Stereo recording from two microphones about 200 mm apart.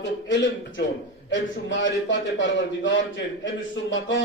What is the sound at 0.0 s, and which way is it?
A man's voice, 65° left (ahead or behind).